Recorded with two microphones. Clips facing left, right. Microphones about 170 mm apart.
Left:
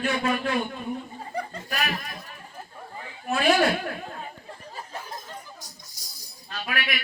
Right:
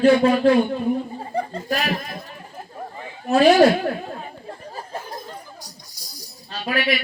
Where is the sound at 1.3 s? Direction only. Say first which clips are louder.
Right 7 dB; 30° right (ahead or behind).